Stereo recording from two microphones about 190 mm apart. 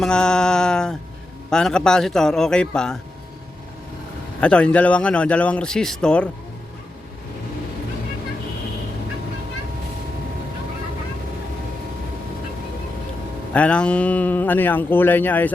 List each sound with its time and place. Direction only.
0.0 s speech: 5° left (ahead or behind)
4.4 s speech: 5° left (ahead or behind)
13.5 s speech: 5° left (ahead or behind)